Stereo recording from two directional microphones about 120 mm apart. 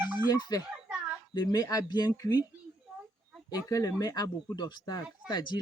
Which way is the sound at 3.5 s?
30° left (ahead or behind).